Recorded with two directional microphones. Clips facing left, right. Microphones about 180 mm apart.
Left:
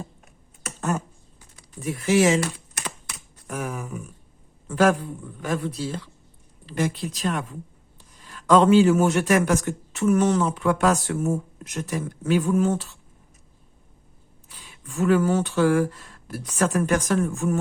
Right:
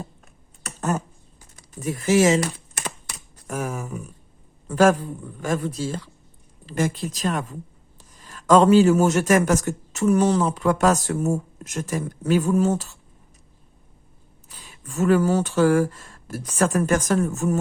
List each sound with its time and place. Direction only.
0.8 s speech: 40° right (ahead or behind)
2.8 s computer keyboard: 40° right (ahead or behind)
4.7 s a man's voice: 45° right (ahead or behind)
14.5 s speech: 45° right (ahead or behind)